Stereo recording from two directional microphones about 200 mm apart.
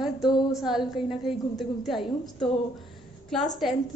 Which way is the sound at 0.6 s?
Centre (ahead or behind).